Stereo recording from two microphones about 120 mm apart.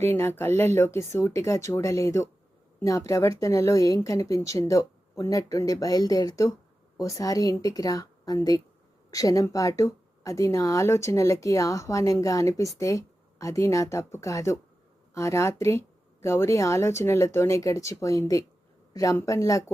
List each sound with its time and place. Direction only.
0.0 s a woman's voice: 20° left (ahead or behind)